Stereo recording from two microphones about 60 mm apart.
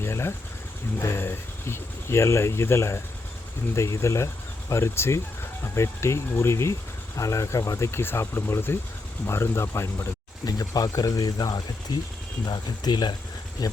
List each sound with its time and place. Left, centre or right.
0.0 s speech: left
3.8 s speech: left
7.9 s speech: left
10.4 s speech: left
12.8 s speech: left